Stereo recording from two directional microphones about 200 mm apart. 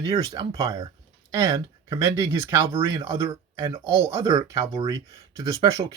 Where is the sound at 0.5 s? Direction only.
15° right (ahead or behind).